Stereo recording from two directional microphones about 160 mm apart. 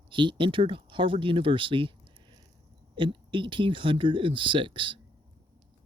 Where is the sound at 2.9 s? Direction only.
30° right (ahead or behind).